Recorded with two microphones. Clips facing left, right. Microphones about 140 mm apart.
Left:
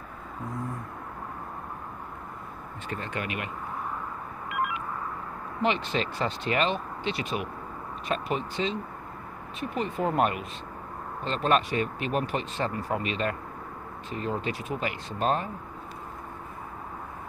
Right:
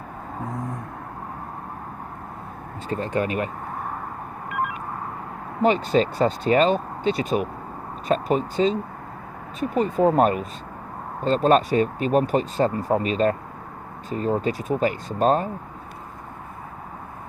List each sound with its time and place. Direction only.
2.9 s speech: 35° right (ahead or behind)
4.5 s a sound: 40° right (ahead or behind)
5.6 s speech: 40° right (ahead or behind)